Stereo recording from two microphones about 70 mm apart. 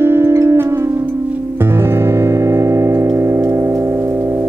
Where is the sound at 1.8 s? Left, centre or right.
Right.